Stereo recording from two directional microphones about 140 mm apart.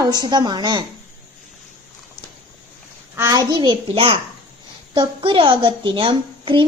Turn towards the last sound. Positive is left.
turn(degrees=-35)  # may be behind; listen again after turning